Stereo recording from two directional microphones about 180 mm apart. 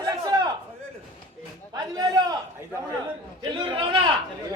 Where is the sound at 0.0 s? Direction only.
20° right (ahead or behind).